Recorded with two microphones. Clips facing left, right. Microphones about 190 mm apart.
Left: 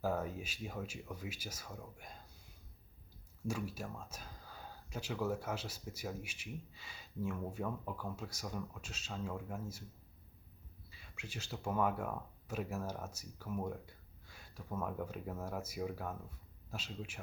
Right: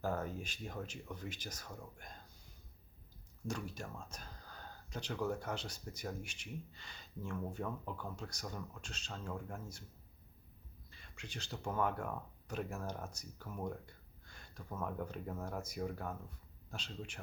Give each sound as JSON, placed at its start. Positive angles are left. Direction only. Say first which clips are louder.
{"t": 0.0, "sound": "speech", "louder": "left 2 dB", "side_deg": 5}
{"t": 3.4, "sound": "speech", "louder": "left 2 dB", "side_deg": 5}
{"t": 10.8, "sound": "speech", "louder": "left 1 dB", "side_deg": 5}